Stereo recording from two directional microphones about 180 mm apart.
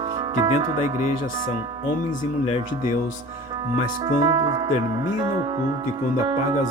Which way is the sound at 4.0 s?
25° right (ahead or behind).